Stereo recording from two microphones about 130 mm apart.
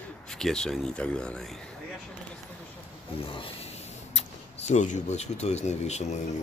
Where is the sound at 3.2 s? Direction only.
45° left (ahead or behind).